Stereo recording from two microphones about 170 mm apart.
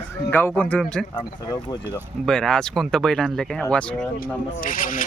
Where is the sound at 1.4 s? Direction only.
25° left (ahead or behind).